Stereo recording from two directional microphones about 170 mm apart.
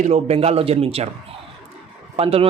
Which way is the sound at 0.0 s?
40° right (ahead or behind).